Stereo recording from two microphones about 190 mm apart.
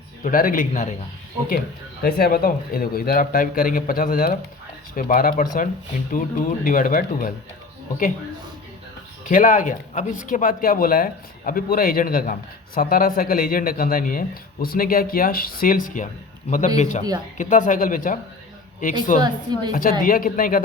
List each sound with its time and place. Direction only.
0.3 s speech: 45° left (ahead or behind)
2.0 s speech: 50° left (ahead or behind)
6.7 s speech: 45° left (ahead or behind)
9.3 s a man's voice: 45° left (ahead or behind)
19.2 s speech: 20° right (ahead or behind)
19.7 s speech: 45° left (ahead or behind)